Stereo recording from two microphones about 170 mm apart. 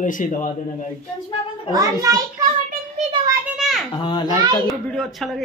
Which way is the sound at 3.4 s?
Centre (ahead or behind).